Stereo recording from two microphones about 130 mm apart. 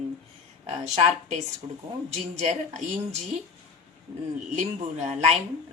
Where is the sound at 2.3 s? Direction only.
60° right (ahead or behind).